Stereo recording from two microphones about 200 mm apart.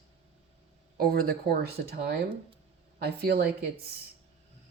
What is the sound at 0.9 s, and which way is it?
Speech, 50° right (ahead or behind).